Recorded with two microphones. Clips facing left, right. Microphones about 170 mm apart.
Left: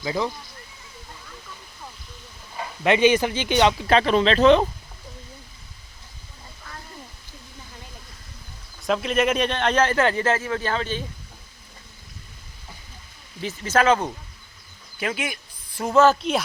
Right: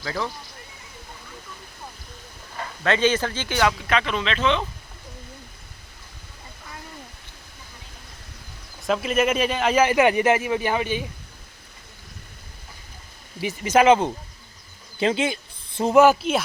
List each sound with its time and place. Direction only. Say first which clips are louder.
0.0 s speech: left 3 dB; 15° left (ahead or behind)
2.6 s a man's voice: left 3 dB; 15° left (ahead or behind); by 4.6 s 40° left (ahead or behind)
8.9 s speech: even; centre (ahead or behind)
13.4 s speech: right 3 dB; 15° right (ahead or behind)
14.9 s a sound: right 6 dB; 25° right (ahead or behind)
16.2 s speech: right 1 dB; 5° right (ahead or behind)